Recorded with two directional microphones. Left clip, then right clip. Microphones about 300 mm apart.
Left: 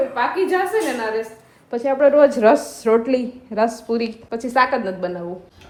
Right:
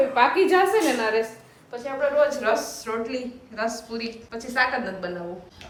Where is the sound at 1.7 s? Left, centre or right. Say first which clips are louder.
Left 10 dB; left.